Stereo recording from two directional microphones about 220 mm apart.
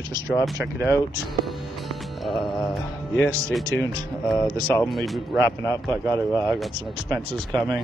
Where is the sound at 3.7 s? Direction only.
10° left (ahead or behind).